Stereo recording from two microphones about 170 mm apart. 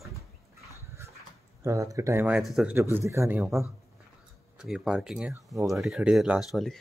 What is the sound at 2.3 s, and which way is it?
Speech, centre (ahead or behind).